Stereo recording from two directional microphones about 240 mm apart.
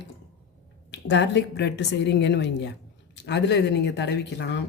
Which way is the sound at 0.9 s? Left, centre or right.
Left.